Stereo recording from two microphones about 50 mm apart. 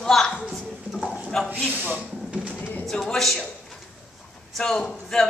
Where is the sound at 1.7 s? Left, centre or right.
Right.